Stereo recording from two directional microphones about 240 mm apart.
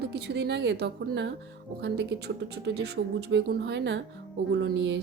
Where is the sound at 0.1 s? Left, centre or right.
Right.